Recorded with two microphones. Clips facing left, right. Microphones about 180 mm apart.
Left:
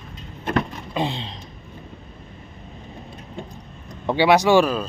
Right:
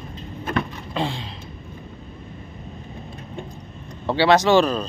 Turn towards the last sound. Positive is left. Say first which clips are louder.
# even
turn(degrees=10)  # may be behind; listen again after turning